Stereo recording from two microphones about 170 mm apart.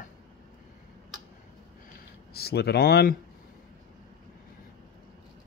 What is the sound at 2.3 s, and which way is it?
Speech, 70° left (ahead or behind).